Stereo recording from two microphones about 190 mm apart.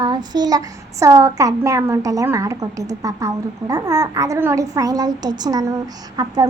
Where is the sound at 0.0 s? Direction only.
20° right (ahead or behind).